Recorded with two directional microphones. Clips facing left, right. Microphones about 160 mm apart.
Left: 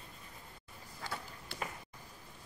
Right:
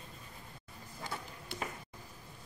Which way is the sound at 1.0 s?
20° right (ahead or behind).